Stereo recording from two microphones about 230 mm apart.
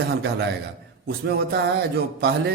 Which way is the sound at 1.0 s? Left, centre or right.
Right.